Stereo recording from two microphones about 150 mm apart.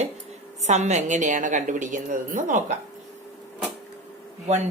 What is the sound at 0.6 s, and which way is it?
A woman's voice, 50° right (ahead or behind).